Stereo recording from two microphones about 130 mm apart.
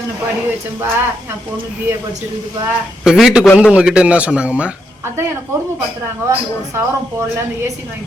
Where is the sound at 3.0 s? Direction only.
5° right (ahead or behind).